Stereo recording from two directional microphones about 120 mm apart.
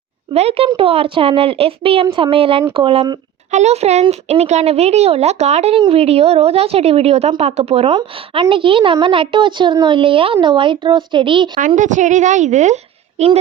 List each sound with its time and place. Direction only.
0.3 s a woman's voice: 55° right (ahead or behind)
3.5 s a child's voice: 65° right (ahead or behind)
5.7 s a woman's voice: 50° right (ahead or behind)
11.6 s a woman's voice: 90° right; by 13.4 s 65° right (ahead or behind)